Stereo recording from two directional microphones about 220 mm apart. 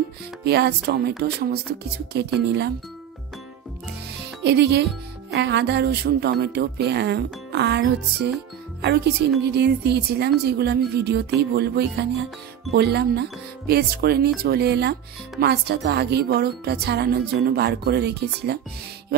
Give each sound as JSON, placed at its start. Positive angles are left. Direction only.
{"t": 0.4, "sound": "speech", "side_deg": -50}
{"t": 4.4, "sound": "speech", "side_deg": -50}